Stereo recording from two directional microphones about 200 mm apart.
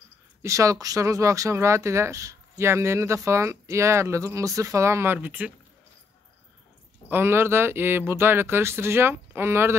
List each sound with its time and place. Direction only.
0.4 s speech: 15° right (ahead or behind)
7.1 s speech: 10° right (ahead or behind)